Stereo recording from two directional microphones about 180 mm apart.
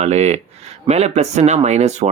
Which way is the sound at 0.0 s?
40° right (ahead or behind).